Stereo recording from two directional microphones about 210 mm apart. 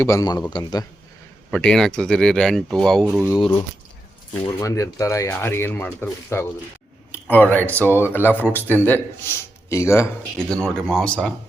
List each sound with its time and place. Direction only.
0.0 s a man's voice: 15° left (ahead or behind)
1.5 s speech: 5° left (ahead or behind)
4.4 s a man's voice: 15° left (ahead or behind)